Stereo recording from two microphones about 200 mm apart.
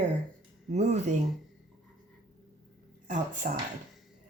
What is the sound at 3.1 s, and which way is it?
Speech, 40° right (ahead or behind).